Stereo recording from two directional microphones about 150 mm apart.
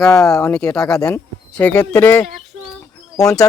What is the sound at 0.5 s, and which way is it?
Speech, 5° left (ahead or behind).